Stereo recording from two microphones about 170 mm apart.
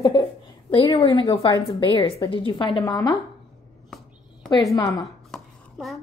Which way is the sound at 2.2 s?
30° left (ahead or behind).